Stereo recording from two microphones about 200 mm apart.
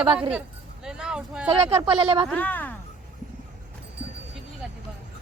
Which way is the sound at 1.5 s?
30° right (ahead or behind).